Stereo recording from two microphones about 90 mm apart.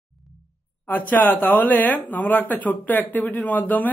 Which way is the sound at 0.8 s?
20° left (ahead or behind).